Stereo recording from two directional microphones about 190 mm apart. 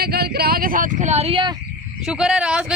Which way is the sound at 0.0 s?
55° right (ahead or behind).